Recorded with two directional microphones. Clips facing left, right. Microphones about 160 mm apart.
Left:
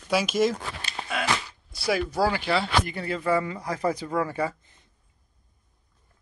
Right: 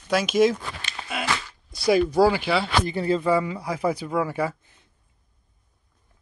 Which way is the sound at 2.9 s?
30° right (ahead or behind).